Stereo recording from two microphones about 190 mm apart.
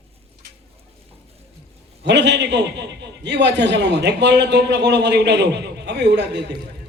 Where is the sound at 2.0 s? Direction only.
65° right (ahead or behind).